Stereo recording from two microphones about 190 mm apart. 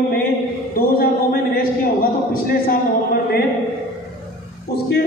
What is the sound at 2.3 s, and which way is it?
Speech, 50° left (ahead or behind).